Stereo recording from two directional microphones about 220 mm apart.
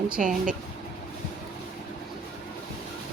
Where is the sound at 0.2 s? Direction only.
35° right (ahead or behind).